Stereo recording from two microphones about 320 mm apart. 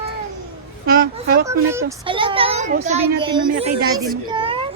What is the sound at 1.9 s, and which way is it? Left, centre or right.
A child's voice, centre.